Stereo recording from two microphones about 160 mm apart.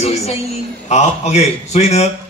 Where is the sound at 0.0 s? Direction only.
40° left (ahead or behind).